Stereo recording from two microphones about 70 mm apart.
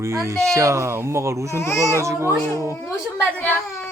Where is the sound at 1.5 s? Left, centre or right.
Left.